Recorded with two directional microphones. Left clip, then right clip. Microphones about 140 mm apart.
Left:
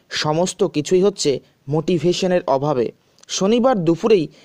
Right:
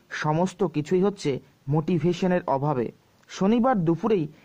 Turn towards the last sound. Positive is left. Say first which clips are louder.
# left 8 dB
turn(degrees=25)  # may be behind; listen again after turning